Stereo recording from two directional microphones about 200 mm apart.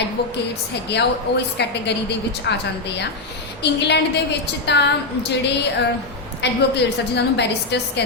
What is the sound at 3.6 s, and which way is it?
Speech, 55° left (ahead or behind).